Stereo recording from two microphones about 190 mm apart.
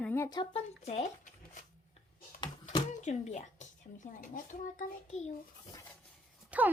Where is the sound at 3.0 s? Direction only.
35° left (ahead or behind).